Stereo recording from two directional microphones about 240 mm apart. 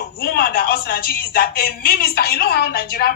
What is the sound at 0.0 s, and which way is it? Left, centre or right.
A man's voice, left.